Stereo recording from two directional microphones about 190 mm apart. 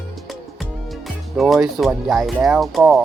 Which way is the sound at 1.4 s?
Centre (ahead or behind).